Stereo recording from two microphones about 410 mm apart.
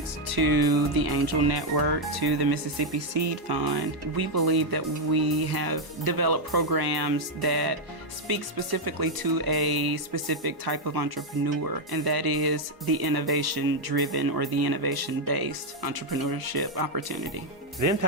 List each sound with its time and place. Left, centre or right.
0.3 s speech: right
1.5 s speech: right